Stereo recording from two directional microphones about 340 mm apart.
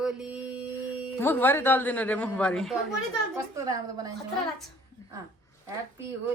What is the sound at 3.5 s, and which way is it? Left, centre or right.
Speech, centre.